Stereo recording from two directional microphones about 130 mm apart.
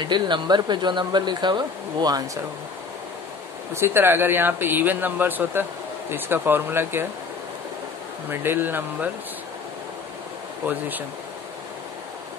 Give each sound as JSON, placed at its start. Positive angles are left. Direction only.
{"t": 0.0, "sound": "speech", "side_deg": -35}
{"t": 3.7, "sound": "speech", "side_deg": -20}
{"t": 8.3, "sound": "speech", "side_deg": -15}